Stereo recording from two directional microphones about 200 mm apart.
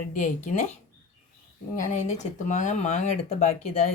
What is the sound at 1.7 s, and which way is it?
Speech, 40° left (ahead or behind).